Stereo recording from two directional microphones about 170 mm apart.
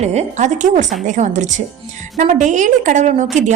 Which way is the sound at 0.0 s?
40° right (ahead or behind).